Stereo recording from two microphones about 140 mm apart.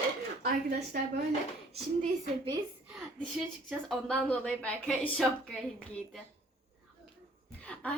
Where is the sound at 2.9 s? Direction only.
5° right (ahead or behind).